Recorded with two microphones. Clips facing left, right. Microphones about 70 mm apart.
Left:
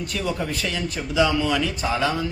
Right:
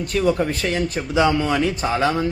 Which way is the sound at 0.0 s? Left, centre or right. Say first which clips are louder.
Right 7 dB; right.